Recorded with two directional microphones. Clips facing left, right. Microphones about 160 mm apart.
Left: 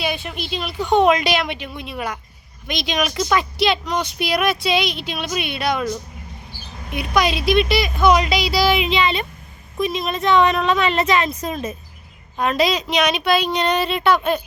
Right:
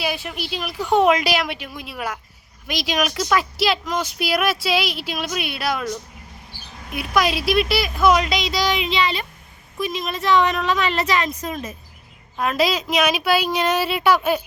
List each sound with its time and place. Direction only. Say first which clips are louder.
0.0 s speech: left 1 dB; 5° right (ahead or behind); by 11.7 s 30° left (ahead or behind)
12.4 s speech: left 2 dB; centre (ahead or behind)